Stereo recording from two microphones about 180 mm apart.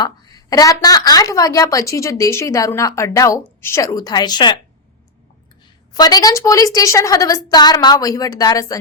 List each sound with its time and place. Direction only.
0.0 s a woman's voice: 20° left (ahead or behind)
5.9 s a woman's voice: 20° left (ahead or behind)